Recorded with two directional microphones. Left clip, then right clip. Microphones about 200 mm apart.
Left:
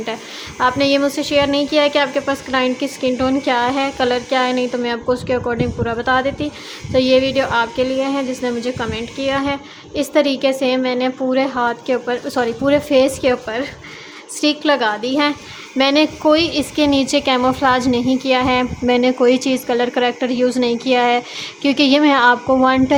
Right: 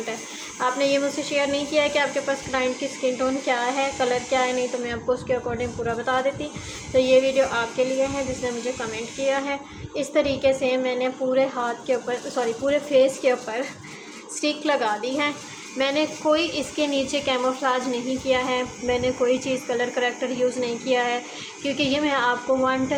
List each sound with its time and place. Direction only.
0.6 s a woman's voice: 40° left (ahead or behind)